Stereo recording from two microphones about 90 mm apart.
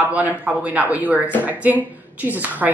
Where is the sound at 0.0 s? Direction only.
20° right (ahead or behind).